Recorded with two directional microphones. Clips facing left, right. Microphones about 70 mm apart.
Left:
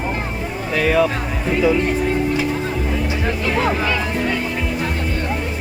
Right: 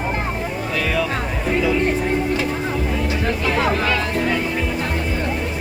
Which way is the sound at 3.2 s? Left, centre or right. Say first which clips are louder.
Even; centre.